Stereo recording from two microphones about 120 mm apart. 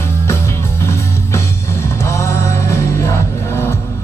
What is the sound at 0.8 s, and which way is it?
Music, 20° left (ahead or behind).